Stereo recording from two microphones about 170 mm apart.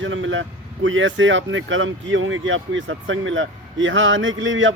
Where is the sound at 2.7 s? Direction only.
90° right.